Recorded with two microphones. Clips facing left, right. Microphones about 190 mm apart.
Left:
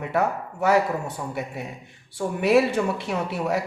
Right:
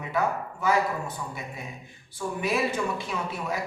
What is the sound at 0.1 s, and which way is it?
Speech, 70° left (ahead or behind).